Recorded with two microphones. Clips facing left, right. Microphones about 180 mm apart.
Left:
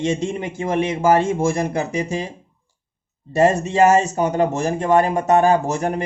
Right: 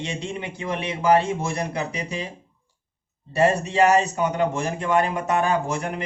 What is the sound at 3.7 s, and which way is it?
Speech, 40° left (ahead or behind).